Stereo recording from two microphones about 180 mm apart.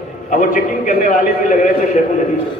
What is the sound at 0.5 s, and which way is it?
A man's voice, 45° left (ahead or behind).